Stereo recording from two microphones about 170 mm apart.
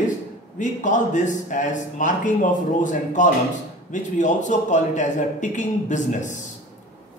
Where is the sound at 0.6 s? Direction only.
50° left (ahead or behind).